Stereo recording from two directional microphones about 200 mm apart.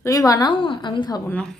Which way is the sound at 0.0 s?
15° left (ahead or behind).